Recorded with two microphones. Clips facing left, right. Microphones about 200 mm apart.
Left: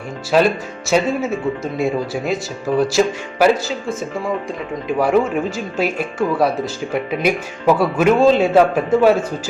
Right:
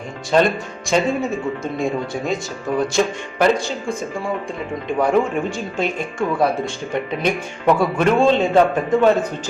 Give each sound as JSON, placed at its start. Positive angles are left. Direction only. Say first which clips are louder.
{"t": 0.3, "sound": "speech", "louder": "left 1 dB", "side_deg": 5}